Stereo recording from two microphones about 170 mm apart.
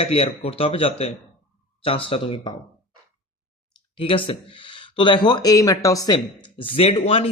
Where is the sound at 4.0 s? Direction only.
30° left (ahead or behind).